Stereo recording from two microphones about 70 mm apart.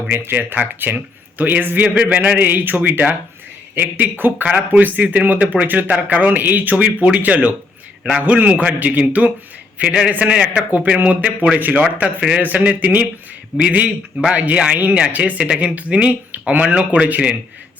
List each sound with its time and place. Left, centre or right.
0.1 s speech: right